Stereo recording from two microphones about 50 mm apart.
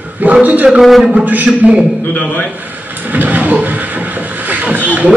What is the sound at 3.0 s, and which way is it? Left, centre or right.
Beatboxing, right.